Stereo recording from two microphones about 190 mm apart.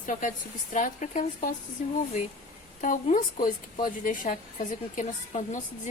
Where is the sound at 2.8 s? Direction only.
45° left (ahead or behind).